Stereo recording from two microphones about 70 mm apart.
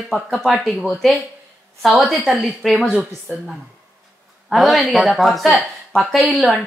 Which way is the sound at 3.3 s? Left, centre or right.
Right.